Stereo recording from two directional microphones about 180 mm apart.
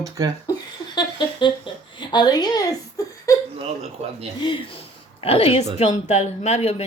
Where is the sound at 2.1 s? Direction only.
25° left (ahead or behind).